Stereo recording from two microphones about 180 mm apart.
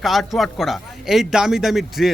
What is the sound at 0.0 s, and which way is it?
Speech, centre (ahead or behind).